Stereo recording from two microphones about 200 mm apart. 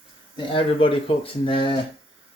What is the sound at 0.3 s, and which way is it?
Speech, 25° left (ahead or behind).